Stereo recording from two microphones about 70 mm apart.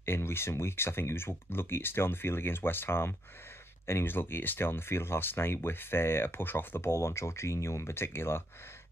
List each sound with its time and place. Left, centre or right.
0.0 s speech: left